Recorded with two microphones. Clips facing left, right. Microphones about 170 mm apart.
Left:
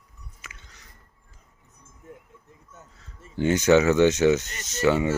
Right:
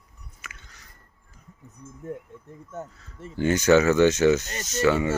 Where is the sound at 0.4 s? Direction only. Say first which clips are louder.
Right 3 dB; 20° left (ahead or behind).